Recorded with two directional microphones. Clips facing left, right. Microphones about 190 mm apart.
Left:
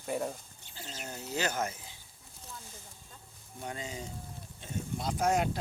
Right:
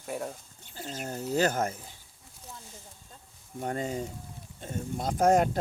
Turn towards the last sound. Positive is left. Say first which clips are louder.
# right 6 dB
turn(degrees=-50)  # may be behind; listen again after turning